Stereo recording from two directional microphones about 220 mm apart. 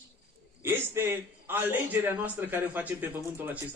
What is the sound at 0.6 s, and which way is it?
A man's voice, 10° right (ahead or behind).